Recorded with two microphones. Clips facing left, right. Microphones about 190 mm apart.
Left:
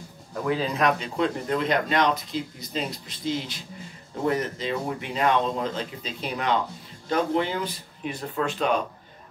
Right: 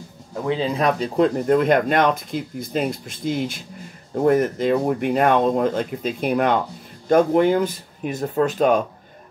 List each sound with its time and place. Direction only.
0.3 s speech: 25° right (ahead or behind); by 8.8 s 45° right (ahead or behind)